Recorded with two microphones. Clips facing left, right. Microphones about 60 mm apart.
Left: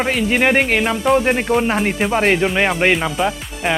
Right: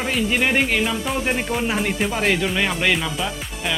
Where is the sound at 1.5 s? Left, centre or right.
Left.